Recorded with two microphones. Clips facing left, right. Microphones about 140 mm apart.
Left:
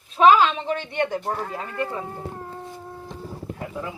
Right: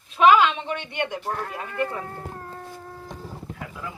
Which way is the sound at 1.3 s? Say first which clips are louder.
Left 2 dB; 5° left (ahead or behind).